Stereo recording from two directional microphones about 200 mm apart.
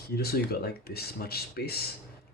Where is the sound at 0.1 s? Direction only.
50° left (ahead or behind).